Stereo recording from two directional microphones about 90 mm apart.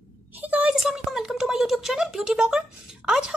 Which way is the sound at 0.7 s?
5° right (ahead or behind).